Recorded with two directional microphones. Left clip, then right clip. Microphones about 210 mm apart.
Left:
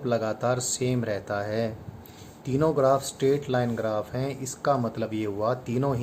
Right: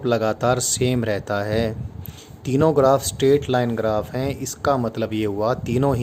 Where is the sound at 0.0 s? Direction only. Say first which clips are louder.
Right 6 dB; 50° right (ahead or behind).